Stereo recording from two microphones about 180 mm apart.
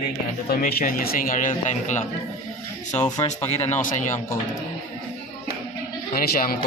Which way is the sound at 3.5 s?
40° left (ahead or behind).